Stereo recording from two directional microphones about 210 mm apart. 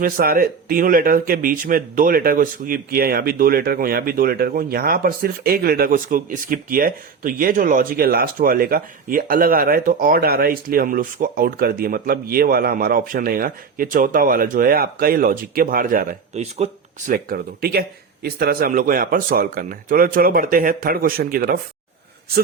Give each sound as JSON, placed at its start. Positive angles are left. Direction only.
{"t": 0.0, "sound": "speech", "side_deg": -45}
{"t": 17.1, "sound": "speech", "side_deg": -45}